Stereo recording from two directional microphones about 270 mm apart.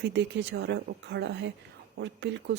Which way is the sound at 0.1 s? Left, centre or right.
Right.